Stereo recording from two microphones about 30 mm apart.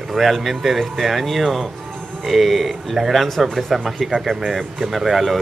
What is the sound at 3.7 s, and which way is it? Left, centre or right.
A man's voice, centre.